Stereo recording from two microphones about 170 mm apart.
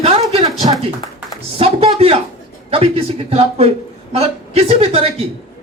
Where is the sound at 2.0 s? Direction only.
35° right (ahead or behind).